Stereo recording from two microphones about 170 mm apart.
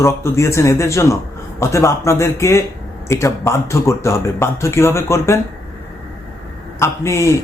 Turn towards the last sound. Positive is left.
turn(degrees=15)  # may be behind; listen again after turning